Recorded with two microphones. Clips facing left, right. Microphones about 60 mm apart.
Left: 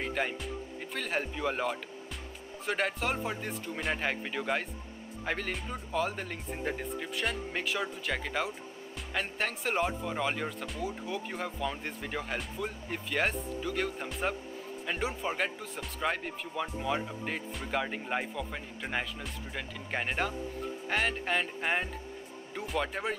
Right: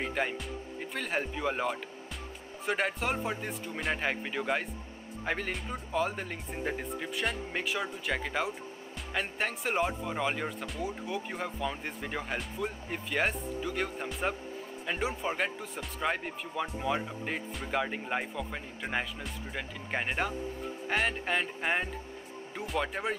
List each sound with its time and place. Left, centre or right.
0.0 s speech: centre
11.1 s speech: centre
11.3 s speech: centre